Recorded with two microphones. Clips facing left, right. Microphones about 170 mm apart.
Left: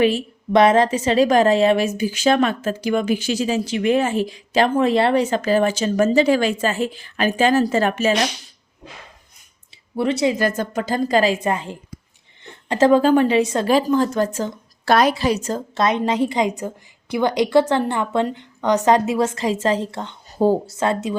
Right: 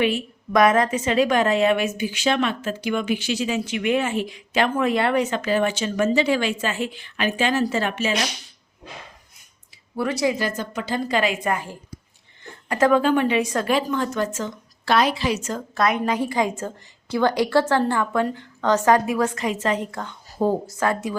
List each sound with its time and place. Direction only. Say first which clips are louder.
0.0 s a woman's voice: left 4 dB; 35° left (ahead or behind)
10.0 s a woman's voice: left 3 dB; 25° left (ahead or behind)
10.3 s a woman's voice: left 5 dB; 50° left (ahead or behind); by 21.2 s 25° left (ahead or behind)